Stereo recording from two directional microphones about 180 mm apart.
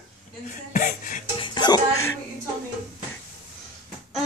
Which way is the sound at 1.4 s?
25° left (ahead or behind).